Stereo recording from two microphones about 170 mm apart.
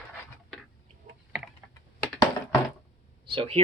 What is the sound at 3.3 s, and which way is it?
Speech, 35° right (ahead or behind).